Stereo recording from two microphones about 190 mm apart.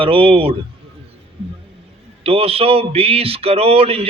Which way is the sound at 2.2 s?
30° right (ahead or behind).